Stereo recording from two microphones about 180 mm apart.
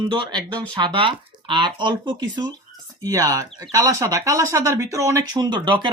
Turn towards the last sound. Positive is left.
turn(degrees=-25)  # may be behind; listen again after turning